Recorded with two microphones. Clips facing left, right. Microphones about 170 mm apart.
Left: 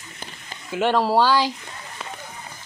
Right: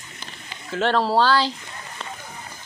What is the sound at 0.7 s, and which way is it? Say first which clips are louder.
Speech: left 1 dB; 10° left (ahead or behind).